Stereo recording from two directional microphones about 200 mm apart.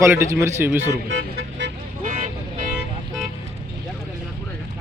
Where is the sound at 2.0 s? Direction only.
40° right (ahead or behind).